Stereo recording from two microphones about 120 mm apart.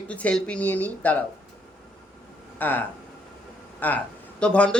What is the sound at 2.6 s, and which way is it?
A man's voice, 15° left (ahead or behind).